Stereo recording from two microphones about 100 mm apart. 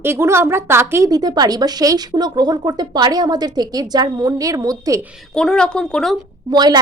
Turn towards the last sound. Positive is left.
turn(degrees=-45)  # may be behind; listen again after turning